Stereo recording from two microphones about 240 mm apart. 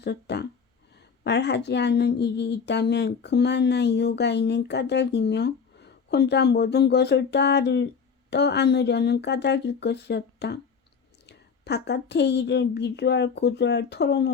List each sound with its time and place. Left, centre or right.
0.0 s a woman's voice: left